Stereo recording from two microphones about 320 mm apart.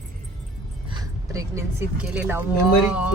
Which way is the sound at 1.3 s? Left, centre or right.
Centre.